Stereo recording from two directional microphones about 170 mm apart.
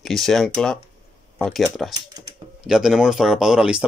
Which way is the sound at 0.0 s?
Centre (ahead or behind).